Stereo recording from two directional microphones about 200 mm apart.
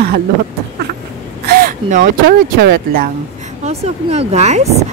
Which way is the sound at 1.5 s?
45° right (ahead or behind).